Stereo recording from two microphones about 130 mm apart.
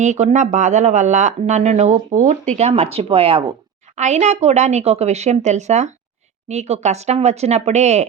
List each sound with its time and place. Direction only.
0.0 s speech: 65° right (ahead or behind); by 3.4 s 45° right (ahead or behind)
3.9 s speech: 60° right (ahead or behind)